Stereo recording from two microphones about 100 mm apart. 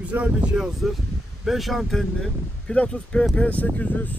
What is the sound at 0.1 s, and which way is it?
Speech, 15° right (ahead or behind).